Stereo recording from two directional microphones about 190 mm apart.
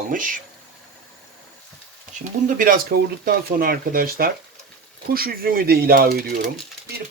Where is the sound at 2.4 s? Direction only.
45° right (ahead or behind).